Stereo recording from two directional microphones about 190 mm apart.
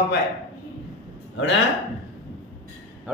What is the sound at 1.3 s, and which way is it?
Speech, 75° left (ahead or behind).